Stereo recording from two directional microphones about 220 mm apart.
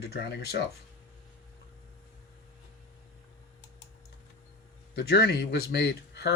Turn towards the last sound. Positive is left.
turn(degrees=50)  # may be behind; listen again after turning